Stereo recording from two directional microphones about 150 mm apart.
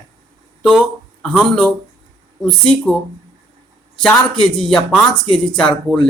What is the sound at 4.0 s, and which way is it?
Speech, 5° left (ahead or behind).